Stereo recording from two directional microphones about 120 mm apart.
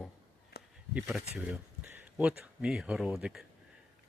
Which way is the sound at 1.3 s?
10° right (ahead or behind).